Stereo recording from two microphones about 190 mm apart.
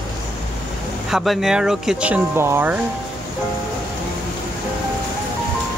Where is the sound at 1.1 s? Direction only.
Centre (ahead or behind).